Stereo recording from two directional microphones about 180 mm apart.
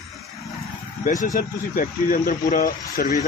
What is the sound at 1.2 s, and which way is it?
Speech, 50° left (ahead or behind).